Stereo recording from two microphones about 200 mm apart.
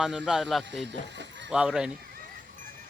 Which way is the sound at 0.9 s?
60° right (ahead or behind).